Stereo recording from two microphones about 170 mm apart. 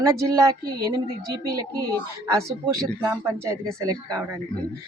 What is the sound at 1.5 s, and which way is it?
A woman's voice, 20° right (ahead or behind).